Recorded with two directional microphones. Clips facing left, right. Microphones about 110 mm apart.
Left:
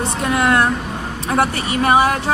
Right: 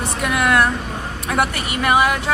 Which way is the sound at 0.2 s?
25° left (ahead or behind).